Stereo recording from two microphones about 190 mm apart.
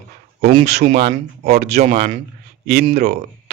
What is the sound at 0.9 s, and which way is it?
Speech, 55° right (ahead or behind).